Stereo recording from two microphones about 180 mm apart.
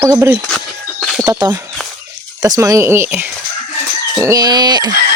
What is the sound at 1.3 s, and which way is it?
Speech, 20° right (ahead or behind).